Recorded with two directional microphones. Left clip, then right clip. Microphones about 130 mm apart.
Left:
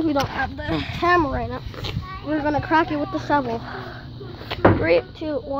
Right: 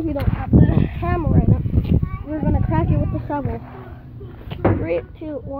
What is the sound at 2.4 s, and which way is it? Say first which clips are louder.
Speech: left 5 dB; 20° left (ahead or behind).